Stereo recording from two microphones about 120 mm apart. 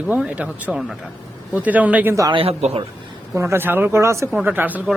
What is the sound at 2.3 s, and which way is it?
Speech, 55° right (ahead or behind).